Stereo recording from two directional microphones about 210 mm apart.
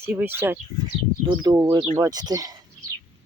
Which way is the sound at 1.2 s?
20° right (ahead or behind).